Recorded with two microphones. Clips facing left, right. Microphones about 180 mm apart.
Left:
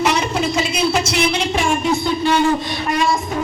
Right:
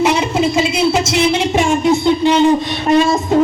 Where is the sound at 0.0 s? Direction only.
20° right (ahead or behind).